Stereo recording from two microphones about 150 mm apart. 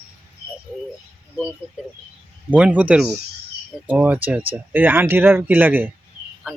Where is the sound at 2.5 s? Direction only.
10° right (ahead or behind).